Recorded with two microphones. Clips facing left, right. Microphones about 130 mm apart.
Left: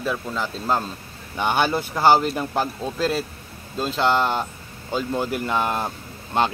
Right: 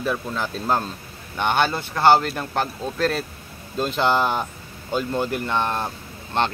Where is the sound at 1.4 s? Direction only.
10° left (ahead or behind).